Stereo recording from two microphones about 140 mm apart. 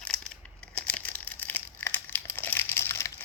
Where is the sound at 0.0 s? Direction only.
5° left (ahead or behind).